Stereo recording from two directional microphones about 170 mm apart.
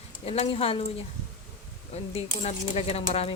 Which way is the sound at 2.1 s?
40° left (ahead or behind).